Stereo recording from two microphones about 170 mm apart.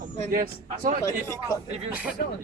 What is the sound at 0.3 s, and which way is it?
Speech, 55° right (ahead or behind).